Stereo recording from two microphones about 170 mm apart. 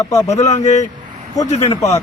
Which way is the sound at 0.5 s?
45° left (ahead or behind).